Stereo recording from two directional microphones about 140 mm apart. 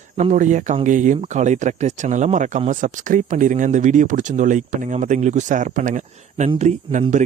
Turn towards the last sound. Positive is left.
turn(degrees=-60)  # may be behind; listen again after turning